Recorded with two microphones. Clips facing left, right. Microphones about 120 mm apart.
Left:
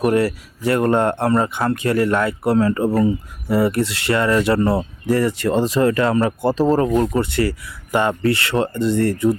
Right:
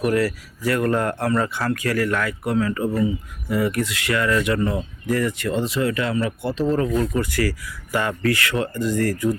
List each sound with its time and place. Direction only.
0.0 s speech: 30° left (ahead or behind)